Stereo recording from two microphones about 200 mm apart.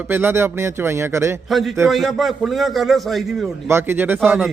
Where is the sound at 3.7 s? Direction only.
10° right (ahead or behind).